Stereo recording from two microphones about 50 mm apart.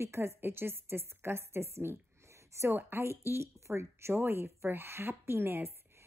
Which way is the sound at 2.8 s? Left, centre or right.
Right.